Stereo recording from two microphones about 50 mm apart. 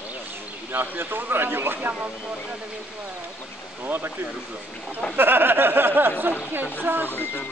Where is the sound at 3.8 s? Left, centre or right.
Right.